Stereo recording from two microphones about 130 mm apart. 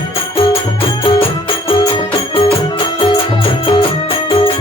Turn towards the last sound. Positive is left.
turn(degrees=40)  # may be behind; listen again after turning